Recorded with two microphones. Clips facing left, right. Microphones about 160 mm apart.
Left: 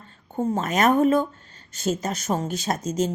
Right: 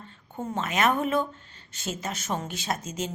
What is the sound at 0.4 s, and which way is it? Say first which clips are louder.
Speech: left 5 dB; 40° left (ahead or behind).